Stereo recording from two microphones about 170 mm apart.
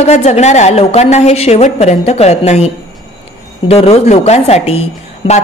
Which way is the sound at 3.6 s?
35° left (ahead or behind).